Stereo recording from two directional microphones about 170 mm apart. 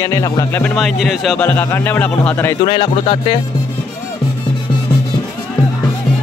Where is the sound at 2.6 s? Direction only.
30° left (ahead or behind).